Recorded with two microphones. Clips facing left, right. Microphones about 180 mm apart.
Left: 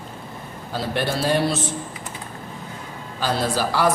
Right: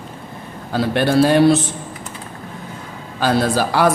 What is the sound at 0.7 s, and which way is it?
Speech, 60° right (ahead or behind).